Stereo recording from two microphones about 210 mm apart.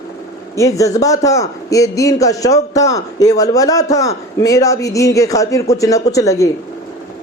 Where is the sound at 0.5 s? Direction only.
15° left (ahead or behind).